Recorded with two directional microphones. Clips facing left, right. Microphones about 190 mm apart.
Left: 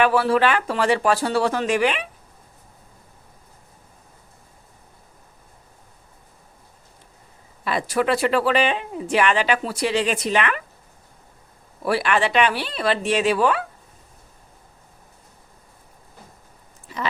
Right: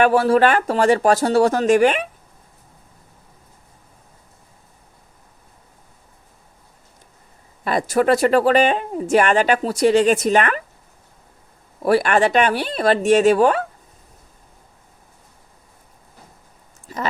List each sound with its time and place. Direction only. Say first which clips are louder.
0.0 s speech: right 4 dB; 45° right (ahead or behind)
7.6 s speech: right 4 dB; 45° right (ahead or behind)
11.8 s speech: right 5 dB; 45° right (ahead or behind)